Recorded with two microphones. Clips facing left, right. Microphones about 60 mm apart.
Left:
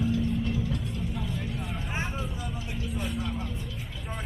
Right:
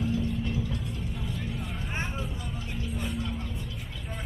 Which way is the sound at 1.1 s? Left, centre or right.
Centre.